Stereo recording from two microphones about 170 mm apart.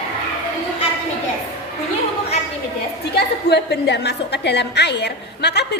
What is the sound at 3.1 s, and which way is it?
A woman's voice, 80° left.